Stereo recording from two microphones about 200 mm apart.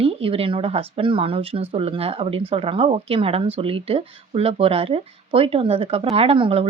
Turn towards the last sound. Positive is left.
turn(degrees=-30)  # may be behind; listen again after turning